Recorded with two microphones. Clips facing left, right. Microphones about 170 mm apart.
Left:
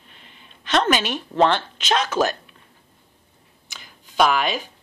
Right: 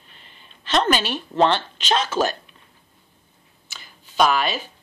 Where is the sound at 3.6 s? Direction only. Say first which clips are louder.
Even; 15° left (ahead or behind).